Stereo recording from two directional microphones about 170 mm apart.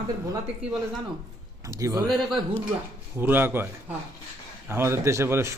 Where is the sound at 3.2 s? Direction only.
10° right (ahead or behind).